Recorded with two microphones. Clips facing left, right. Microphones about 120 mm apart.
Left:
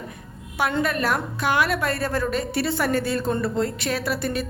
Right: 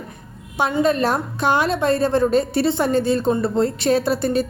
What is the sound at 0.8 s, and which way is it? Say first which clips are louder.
A woman's voice: right 8 dB; 25° right (ahead or behind).